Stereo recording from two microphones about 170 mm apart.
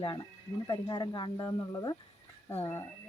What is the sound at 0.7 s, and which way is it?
Speech, 25° left (ahead or behind).